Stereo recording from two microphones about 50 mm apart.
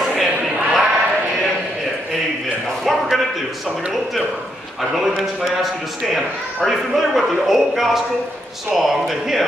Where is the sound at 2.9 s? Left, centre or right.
Centre.